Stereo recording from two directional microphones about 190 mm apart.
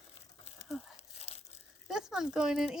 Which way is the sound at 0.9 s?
30° left (ahead or behind).